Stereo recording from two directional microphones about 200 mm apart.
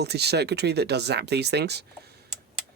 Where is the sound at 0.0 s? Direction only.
55° right (ahead or behind).